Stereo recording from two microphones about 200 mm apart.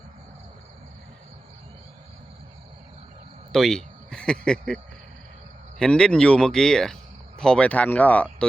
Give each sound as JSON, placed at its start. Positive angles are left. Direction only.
{"t": 3.5, "sound": "speech", "side_deg": 0}
{"t": 5.8, "sound": "speech", "side_deg": 5}